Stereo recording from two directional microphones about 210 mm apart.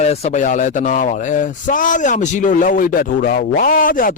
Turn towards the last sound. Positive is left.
turn(degrees=40)  # may be behind; listen again after turning